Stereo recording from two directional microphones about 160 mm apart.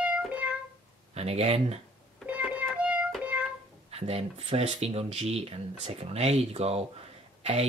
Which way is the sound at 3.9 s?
40° right (ahead or behind).